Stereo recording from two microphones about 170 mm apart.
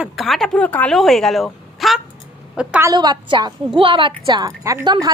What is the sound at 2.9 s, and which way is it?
A woman's voice, 25° right (ahead or behind).